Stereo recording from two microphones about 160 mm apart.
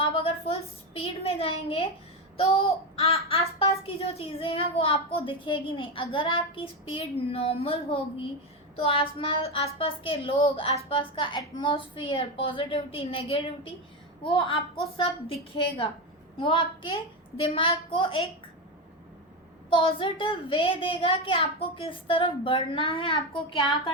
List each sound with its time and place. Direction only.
0.0 s a woman's voice: 35° left (ahead or behind)
19.7 s a child's voice: 35° left (ahead or behind)